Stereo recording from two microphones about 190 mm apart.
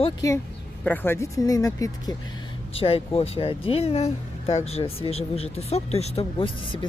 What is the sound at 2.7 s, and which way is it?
Speech, 30° left (ahead or behind).